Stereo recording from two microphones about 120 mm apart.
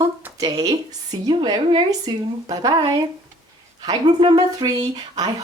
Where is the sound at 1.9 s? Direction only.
30° right (ahead or behind).